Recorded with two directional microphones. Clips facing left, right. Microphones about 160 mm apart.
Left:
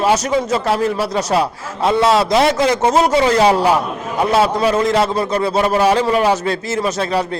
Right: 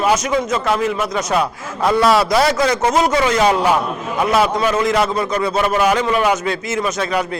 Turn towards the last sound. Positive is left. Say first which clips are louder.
# left 1 dB
turn(degrees=30)  # may be behind; listen again after turning